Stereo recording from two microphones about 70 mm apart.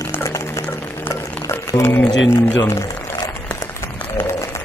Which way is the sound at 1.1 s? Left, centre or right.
Left.